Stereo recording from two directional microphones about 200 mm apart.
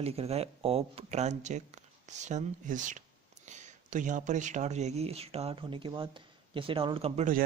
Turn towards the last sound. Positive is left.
turn(degrees=-35)  # may be behind; listen again after turning